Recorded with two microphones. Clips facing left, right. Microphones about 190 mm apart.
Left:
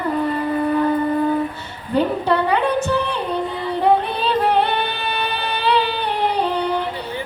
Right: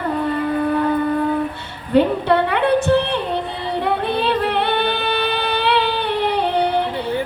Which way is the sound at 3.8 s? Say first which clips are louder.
Left 3 dB; 65° right (ahead or behind).